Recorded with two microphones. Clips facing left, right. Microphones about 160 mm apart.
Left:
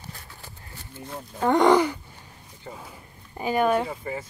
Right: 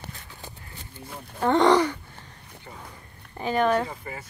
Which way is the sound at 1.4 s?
15° left (ahead or behind).